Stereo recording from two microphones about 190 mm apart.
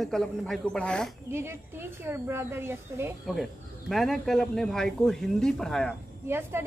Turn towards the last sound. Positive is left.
turn(degrees=-10)  # may be behind; listen again after turning